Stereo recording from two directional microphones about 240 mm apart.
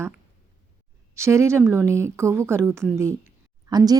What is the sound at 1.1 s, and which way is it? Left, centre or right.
Speech, centre.